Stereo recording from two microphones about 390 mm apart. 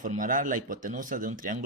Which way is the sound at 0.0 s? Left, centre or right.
Centre.